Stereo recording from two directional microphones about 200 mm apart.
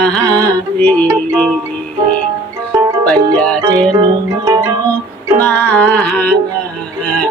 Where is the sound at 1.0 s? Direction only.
15° right (ahead or behind).